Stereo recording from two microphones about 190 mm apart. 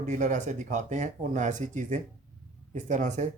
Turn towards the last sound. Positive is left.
turn(degrees=-40)  # may be behind; listen again after turning